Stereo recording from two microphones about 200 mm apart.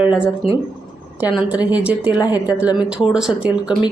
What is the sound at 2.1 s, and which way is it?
Speech, 20° left (ahead or behind).